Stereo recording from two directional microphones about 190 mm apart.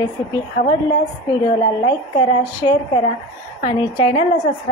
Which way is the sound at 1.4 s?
25° left (ahead or behind).